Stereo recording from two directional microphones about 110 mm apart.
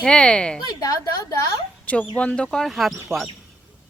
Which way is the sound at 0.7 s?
35° left (ahead or behind).